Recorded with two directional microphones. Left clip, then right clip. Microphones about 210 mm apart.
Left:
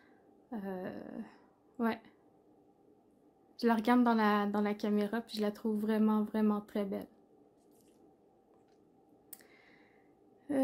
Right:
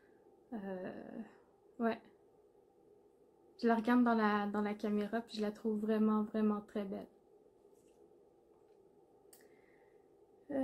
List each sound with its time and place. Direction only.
0.5 s speech: 30° left (ahead or behind)
3.5 s speech: 30° left (ahead or behind)